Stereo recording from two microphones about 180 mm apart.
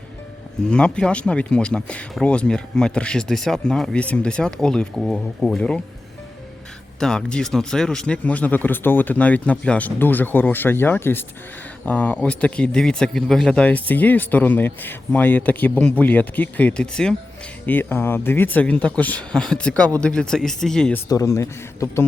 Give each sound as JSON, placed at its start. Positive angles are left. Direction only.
{"t": 0.7, "sound": "speech", "side_deg": 5}
{"t": 7.0, "sound": "speech", "side_deg": 5}
{"t": 21.1, "sound": "speech", "side_deg": 15}